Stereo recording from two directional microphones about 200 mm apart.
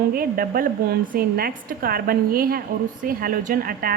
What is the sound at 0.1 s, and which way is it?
A woman's voice, 50° right (ahead or behind).